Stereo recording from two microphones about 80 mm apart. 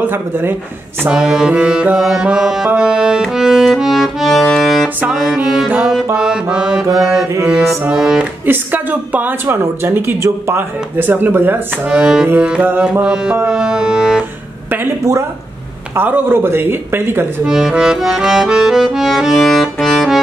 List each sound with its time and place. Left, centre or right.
0.0 s speech: right
1.1 s music: centre
8.5 s speech: right
9.5 s speech: right
11.9 s music: centre
16.0 s speech: right
17.5 s accordion: centre